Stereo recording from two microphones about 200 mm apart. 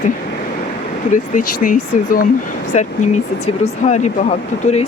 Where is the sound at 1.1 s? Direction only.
45° left (ahead or behind).